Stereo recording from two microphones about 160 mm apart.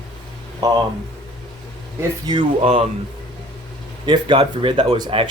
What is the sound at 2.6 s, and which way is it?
Speech, 40° right (ahead or behind).